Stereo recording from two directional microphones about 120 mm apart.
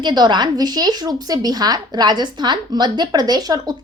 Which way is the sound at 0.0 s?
40° right (ahead or behind).